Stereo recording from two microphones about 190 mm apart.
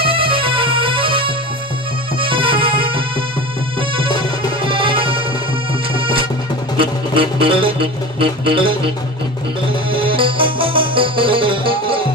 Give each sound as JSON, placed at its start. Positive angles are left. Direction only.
{"t": 0.0, "sound": "music", "side_deg": -30}
{"t": 4.6, "sound": "music", "side_deg": -25}
{"t": 9.8, "sound": "music", "side_deg": -25}